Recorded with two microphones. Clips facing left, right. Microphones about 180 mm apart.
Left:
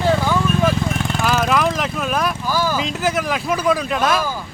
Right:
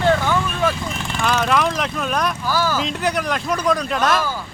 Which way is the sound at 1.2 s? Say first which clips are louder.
Even; 5° left (ahead or behind).